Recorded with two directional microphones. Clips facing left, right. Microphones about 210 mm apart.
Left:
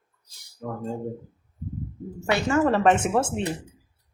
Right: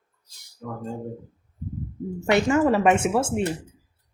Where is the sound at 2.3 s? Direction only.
15° right (ahead or behind).